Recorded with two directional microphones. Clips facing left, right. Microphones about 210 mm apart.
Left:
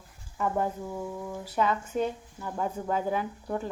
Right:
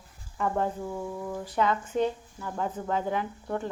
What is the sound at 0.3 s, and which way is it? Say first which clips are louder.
Speech: even; 10° left (ahead or behind).